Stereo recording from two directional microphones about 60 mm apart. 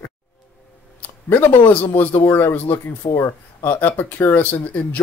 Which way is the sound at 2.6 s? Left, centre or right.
Left.